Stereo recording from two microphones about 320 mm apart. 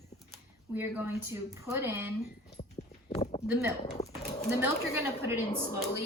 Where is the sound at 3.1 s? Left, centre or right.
Centre.